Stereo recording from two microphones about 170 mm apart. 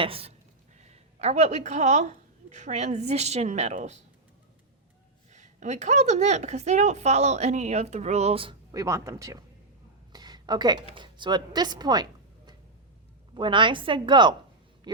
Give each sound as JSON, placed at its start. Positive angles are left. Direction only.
{"t": 0.0, "sound": "a woman's voice", "side_deg": -35}
{"t": 5.3, "sound": "a woman's voice", "side_deg": -45}
{"t": 8.7, "sound": "speech", "side_deg": -20}
{"t": 10.1, "sound": "a sound", "side_deg": -25}
{"t": 10.9, "sound": "speech", "side_deg": -25}
{"t": 13.3, "sound": "speech", "side_deg": -30}
{"t": 14.9, "sound": "a sound", "side_deg": -25}